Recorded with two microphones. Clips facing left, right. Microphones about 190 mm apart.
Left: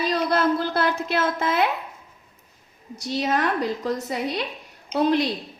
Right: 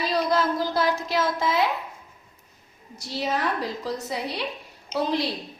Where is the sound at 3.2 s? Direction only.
60° left (ahead or behind).